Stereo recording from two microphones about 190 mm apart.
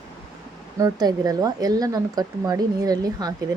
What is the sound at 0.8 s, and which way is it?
Speech, 20° right (ahead or behind).